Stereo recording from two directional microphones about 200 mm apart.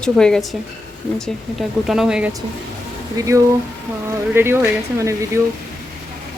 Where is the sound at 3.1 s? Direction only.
15° right (ahead or behind).